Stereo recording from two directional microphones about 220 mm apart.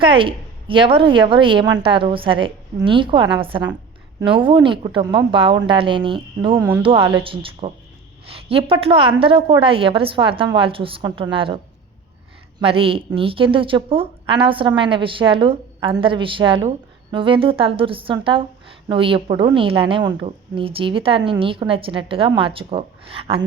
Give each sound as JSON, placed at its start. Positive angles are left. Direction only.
{"t": 0.0, "sound": "a woman's voice", "side_deg": -25}